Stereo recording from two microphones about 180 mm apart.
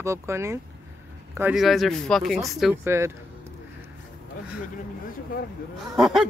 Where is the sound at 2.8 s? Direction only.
15° right (ahead or behind).